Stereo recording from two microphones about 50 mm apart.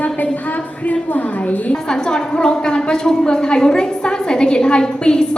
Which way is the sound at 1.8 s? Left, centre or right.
Centre.